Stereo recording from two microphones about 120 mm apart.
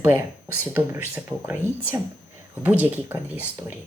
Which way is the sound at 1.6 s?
20° left (ahead or behind).